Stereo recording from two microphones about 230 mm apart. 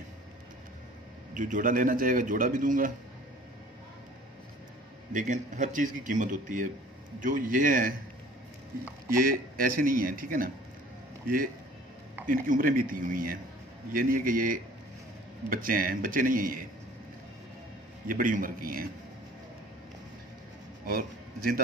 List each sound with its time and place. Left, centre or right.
1.3 s a man's voice: right
5.1 s a man's voice: right
9.1 s a man's voice: right
18.0 s a man's voice: right
20.8 s a man's voice: right